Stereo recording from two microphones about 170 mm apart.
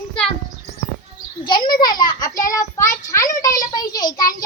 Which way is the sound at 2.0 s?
20° left (ahead or behind).